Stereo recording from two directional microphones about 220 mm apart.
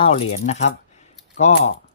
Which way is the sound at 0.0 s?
25° left (ahead or behind).